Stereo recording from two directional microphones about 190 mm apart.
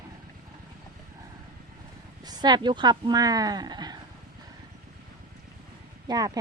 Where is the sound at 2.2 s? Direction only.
20° right (ahead or behind).